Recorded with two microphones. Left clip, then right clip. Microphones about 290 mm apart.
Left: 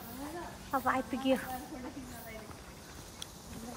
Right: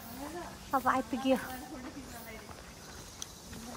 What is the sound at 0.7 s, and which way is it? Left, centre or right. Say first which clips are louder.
Speech: right 2 dB; centre.